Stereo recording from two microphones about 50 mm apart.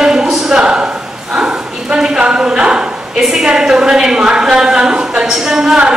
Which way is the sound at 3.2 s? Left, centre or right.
Centre.